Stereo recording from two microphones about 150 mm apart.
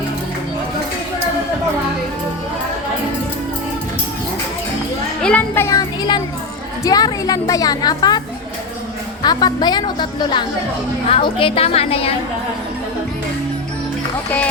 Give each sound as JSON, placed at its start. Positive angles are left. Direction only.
{"t": 5.2, "sound": "a sound", "side_deg": 10}
{"t": 6.8, "sound": "a woman's voice", "side_deg": 25}
{"t": 9.2, "sound": "a woman's voice", "side_deg": 30}